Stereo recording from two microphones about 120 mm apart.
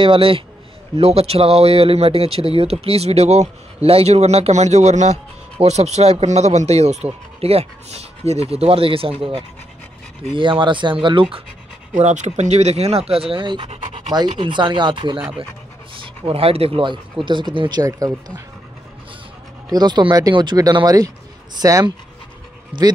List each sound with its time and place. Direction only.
0.0 s speech: 45° right (ahead or behind)
11.9 s speech: 80° right; by 18.4 s 30° right (ahead or behind)
19.7 s speech: 35° right (ahead or behind)
22.7 s speech: 40° right (ahead or behind)